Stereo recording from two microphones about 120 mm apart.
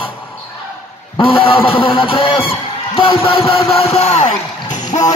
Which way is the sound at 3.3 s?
50° left (ahead or behind).